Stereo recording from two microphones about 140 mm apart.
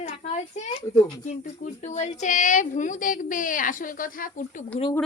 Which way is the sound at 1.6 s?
60° left (ahead or behind).